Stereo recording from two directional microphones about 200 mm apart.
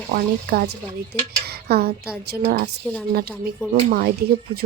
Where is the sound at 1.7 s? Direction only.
55° right (ahead or behind).